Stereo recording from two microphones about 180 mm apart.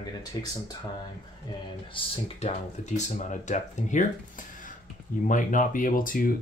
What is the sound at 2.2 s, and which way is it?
Speech, 35° left (ahead or behind).